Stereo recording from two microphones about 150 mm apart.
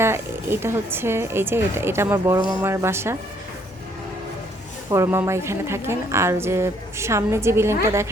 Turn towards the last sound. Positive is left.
turn(degrees=-15)  # may be behind; listen again after turning